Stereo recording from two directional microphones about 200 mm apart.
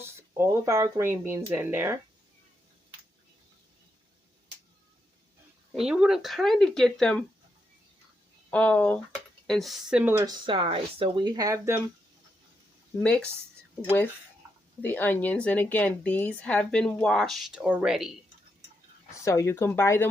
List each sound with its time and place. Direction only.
0.0 s speech: 10° right (ahead or behind)
5.7 s speech: 5° right (ahead or behind)
8.4 s speech: 5° left (ahead or behind); by 11.8 s 15° right (ahead or behind)
13.0 s speech: 5° left (ahead or behind)
14.8 s a woman's voice: 10° left (ahead or behind)
19.2 s a woman's voice: 15° left (ahead or behind)